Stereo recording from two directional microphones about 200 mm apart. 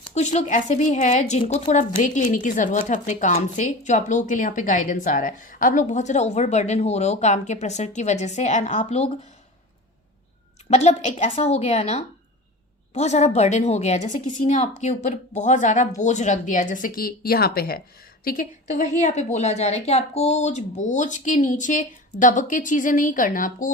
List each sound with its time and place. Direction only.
0.1 s speech: 35° left (ahead or behind)
10.7 s speech: 35° left (ahead or behind)